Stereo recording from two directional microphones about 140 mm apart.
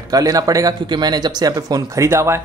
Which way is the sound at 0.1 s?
25° right (ahead or behind).